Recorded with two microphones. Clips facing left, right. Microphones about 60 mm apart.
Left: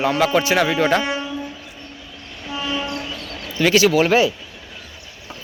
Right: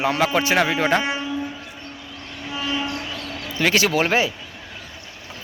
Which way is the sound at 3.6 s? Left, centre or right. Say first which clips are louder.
Left 4 dB; right.